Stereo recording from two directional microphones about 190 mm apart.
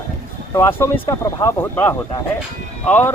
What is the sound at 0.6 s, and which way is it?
Speech, 10° left (ahead or behind).